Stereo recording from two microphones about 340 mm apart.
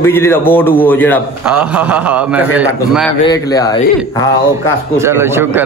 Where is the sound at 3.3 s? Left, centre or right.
Centre.